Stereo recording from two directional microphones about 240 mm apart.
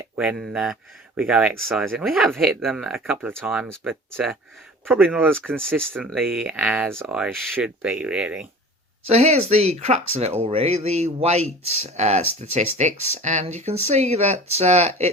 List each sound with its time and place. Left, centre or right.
0.0 s speech: centre
9.0 s speech: right